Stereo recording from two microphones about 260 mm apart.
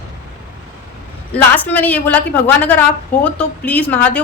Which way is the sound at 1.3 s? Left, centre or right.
Centre.